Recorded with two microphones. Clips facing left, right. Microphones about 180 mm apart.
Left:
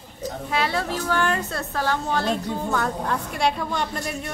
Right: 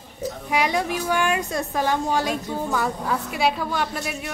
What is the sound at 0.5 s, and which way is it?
A woman's voice, 15° right (ahead or behind).